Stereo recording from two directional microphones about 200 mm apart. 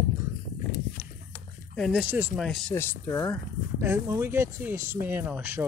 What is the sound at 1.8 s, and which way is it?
Speech, 5° right (ahead or behind).